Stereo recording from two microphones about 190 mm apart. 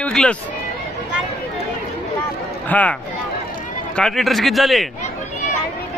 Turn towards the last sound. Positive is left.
turn(degrees=0)  # may be behind; listen again after turning